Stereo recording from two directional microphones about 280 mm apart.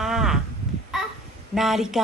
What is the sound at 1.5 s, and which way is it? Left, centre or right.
Speech, centre.